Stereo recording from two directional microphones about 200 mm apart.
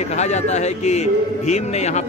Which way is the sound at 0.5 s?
35° left (ahead or behind).